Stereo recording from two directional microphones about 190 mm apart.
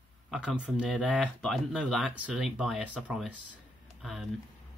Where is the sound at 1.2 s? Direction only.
5° left (ahead or behind).